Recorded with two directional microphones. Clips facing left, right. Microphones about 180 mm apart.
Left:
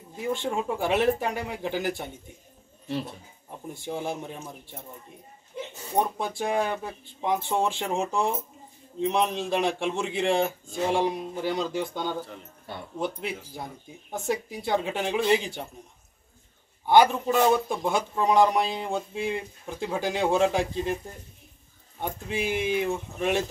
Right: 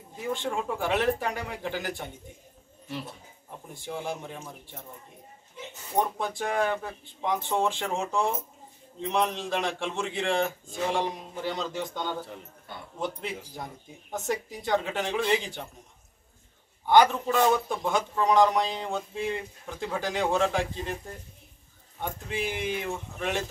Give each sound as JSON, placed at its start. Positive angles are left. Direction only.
{"t": 0.3, "sound": "speech", "side_deg": 15}
{"t": 3.8, "sound": "speech", "side_deg": 15}
{"t": 5.9, "sound": "speech", "side_deg": 15}
{"t": 14.1, "sound": "speech", "side_deg": 10}
{"t": 16.8, "sound": "speech", "side_deg": 15}
{"t": 22.0, "sound": "speech", "side_deg": 15}